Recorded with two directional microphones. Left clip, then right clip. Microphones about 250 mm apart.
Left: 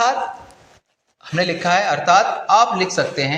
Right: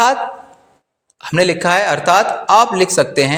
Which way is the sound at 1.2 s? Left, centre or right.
Right.